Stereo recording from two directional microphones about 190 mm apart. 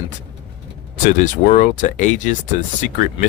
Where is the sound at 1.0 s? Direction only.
40° left (ahead or behind).